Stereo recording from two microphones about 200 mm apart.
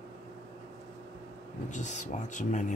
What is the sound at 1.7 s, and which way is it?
Speech, 35° left (ahead or behind).